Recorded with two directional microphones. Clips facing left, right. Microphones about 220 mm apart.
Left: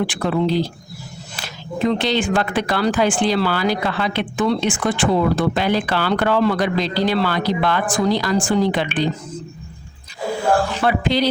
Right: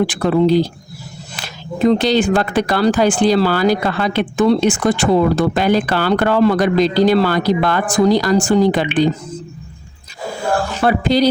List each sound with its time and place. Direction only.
0.0 s speech: 40° right (ahead or behind)
1.8 s speech: 40° right (ahead or behind)
10.7 s speech: 40° right (ahead or behind)